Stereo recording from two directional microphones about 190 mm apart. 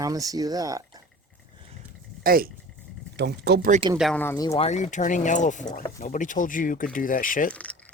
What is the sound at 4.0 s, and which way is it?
Speech, 5° left (ahead or behind).